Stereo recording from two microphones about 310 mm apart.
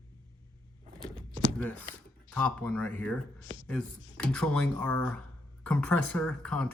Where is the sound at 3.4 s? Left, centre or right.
Right.